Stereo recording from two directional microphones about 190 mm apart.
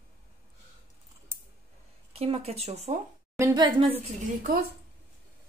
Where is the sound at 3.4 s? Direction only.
20° right (ahead or behind).